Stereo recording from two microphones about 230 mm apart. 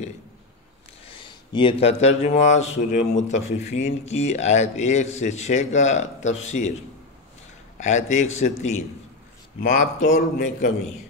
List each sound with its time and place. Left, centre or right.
1.0 s speech: left
7.7 s a man's voice: left